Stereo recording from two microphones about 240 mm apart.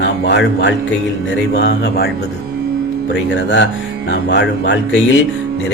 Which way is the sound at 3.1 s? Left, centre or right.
Left.